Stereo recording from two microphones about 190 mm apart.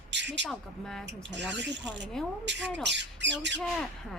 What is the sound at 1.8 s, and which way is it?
Speech, centre (ahead or behind).